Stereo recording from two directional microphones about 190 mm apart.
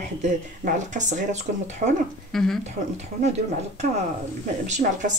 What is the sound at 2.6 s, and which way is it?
Speech, 35° right (ahead or behind).